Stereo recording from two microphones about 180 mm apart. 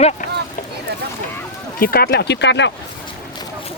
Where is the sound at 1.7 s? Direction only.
55° left (ahead or behind); by 2.7 s 75° left (ahead or behind).